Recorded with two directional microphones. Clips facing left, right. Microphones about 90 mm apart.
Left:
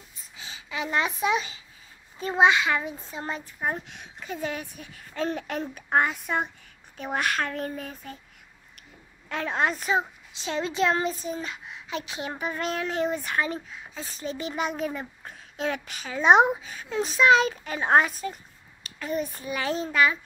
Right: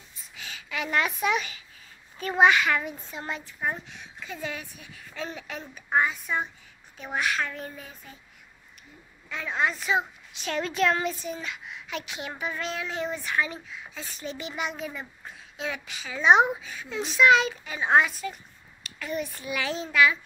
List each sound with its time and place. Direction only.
0.4 s a child's voice: 30° left (ahead or behind)
3.9 s speech: 55° left (ahead or behind)
4.3 s a child's voice: 40° left (ahead or behind)
9.3 s a child's voice: 50° left (ahead or behind)
9.9 s a child's voice: 25° left (ahead or behind)